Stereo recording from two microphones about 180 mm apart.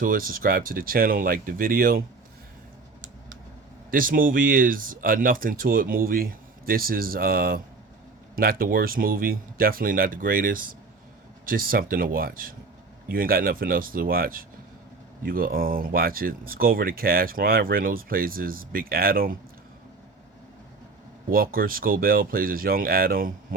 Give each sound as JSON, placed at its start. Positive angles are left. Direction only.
{"t": 0.0, "sound": "speech", "side_deg": -50}
{"t": 3.9, "sound": "speech", "side_deg": -50}
{"t": 21.2, "sound": "speech", "side_deg": -55}